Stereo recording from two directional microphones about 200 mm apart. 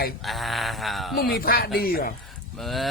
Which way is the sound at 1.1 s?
50° left (ahead or behind).